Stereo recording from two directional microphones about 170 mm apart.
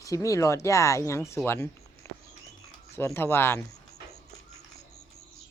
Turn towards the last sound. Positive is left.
turn(degrees=15)  # may be behind; listen again after turning